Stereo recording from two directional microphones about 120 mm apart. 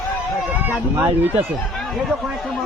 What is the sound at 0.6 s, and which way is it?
Speech, 15° right (ahead or behind).